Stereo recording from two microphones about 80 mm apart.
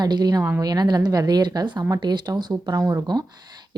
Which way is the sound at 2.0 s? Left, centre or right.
Right.